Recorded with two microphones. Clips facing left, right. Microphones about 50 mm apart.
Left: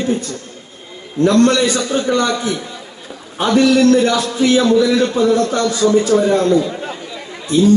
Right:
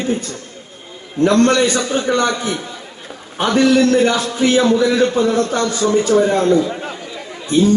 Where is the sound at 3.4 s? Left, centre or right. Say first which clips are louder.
Left 1 dB; right.